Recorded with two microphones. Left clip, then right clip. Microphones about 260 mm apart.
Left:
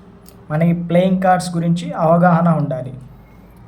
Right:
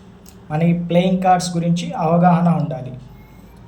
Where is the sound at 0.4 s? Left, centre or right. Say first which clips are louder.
Left 1 dB; centre.